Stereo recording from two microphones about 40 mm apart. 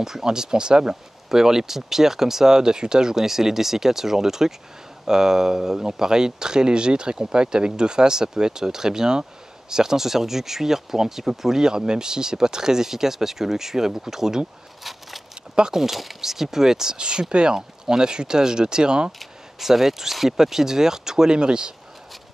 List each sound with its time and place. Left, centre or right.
0.0 s speech: centre
14.8 s a sound: centre
15.5 s speech: centre
19.1 s speech: centre